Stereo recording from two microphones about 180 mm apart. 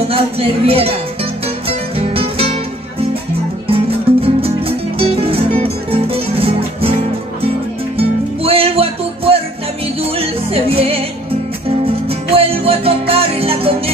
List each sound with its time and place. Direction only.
0.1 s speech: 30° right (ahead or behind)
1.7 s music: 30° right (ahead or behind)
3.6 s music: 30° right (ahead or behind)
8.4 s music: 30° right (ahead or behind)